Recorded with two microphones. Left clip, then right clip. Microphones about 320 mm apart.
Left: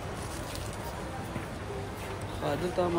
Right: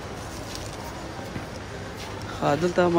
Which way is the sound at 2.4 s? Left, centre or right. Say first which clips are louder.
Right 8 dB; centre.